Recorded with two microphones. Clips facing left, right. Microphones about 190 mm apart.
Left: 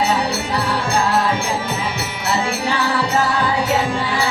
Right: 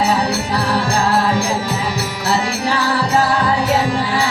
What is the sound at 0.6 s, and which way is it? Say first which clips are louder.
Music: right 1 dB; 35° right (ahead or behind).